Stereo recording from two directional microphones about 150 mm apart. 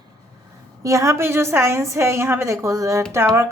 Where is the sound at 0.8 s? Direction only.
20° right (ahead or behind).